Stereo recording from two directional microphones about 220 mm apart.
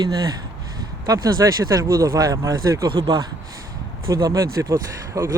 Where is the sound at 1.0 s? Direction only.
15° right (ahead or behind).